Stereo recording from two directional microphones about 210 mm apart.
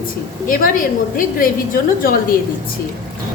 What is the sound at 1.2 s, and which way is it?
Speech, 40° left (ahead or behind).